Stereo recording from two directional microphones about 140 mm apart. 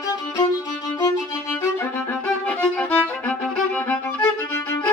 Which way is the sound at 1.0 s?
20° left (ahead or behind).